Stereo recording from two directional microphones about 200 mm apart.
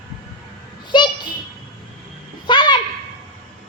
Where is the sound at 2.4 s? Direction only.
20° left (ahead or behind).